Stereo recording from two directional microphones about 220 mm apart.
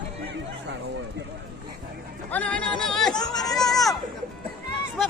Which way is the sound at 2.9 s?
Centre (ahead or behind).